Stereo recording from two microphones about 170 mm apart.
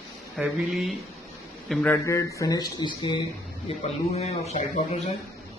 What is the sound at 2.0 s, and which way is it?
Speech, 20° left (ahead or behind).